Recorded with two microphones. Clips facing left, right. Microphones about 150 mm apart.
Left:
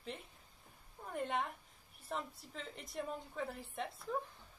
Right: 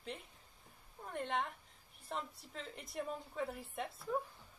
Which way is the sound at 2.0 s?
Centre (ahead or behind).